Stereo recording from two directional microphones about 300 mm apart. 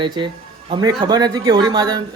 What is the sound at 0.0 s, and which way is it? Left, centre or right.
Speech, centre.